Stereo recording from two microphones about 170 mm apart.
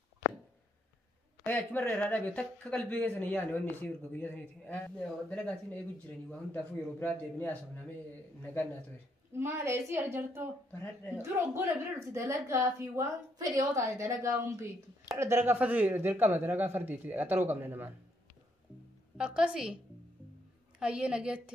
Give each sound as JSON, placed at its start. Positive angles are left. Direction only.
{"t": 1.4, "sound": "speech", "side_deg": 10}
{"t": 9.3, "sound": "a woman's voice", "side_deg": -15}
{"t": 10.7, "sound": "speech", "side_deg": 10}
{"t": 11.2, "sound": "a woman's voice", "side_deg": -15}
{"t": 19.1, "sound": "a woman's voice", "side_deg": -5}
{"t": 20.8, "sound": "a woman's voice", "side_deg": -5}